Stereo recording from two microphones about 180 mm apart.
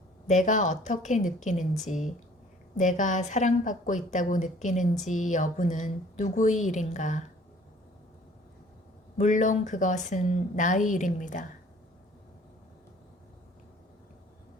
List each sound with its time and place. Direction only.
0.3 s speech: 45° left (ahead or behind)
9.1 s speech: 45° left (ahead or behind)